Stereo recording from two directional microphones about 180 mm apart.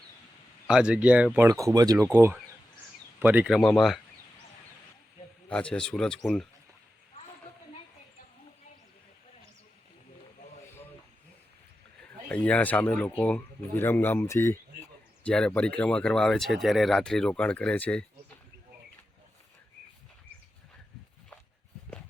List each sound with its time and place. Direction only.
0.7 s speech: 5° right (ahead or behind)
1.5 s speech: 20° right (ahead or behind); by 4.0 s centre (ahead or behind)
5.5 s speech: 5° left (ahead or behind)
12.3 s speech: 5° left (ahead or behind)